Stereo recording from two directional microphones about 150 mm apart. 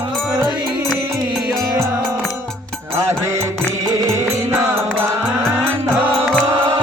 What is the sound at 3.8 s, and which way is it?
Music, 20° right (ahead or behind).